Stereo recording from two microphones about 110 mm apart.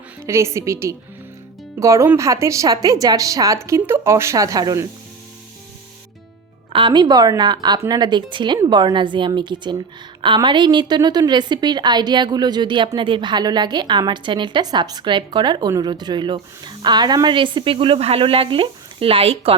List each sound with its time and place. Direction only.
0.2 s a woman's voice: 25° right (ahead or behind)
6.7 s a woman's voice: 45° right (ahead or behind)